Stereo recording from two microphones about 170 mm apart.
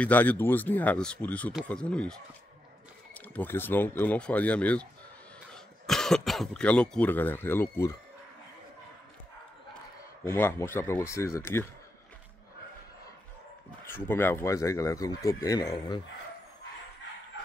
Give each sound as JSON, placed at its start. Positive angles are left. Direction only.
{"t": 0.0, "sound": "speech", "side_deg": 10}
{"t": 3.2, "sound": "speech", "side_deg": 10}
{"t": 10.2, "sound": "speech", "side_deg": 15}
{"t": 13.8, "sound": "speech", "side_deg": 15}